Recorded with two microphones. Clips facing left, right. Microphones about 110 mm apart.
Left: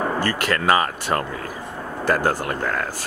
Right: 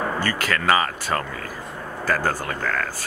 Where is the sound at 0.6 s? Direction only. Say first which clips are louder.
Even; 15° left (ahead or behind).